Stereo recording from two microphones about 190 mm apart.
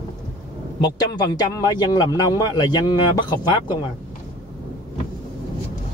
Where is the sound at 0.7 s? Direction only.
25° left (ahead or behind).